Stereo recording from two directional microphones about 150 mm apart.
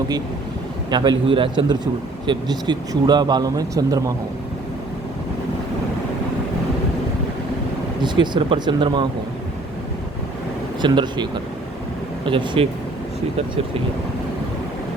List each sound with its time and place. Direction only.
0.9 s a man's voice: 30° right (ahead or behind)
8.0 s speech: 30° right (ahead or behind)
10.8 s speech: 30° right (ahead or behind)